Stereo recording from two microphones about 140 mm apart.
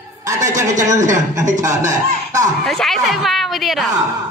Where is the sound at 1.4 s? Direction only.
60° right (ahead or behind).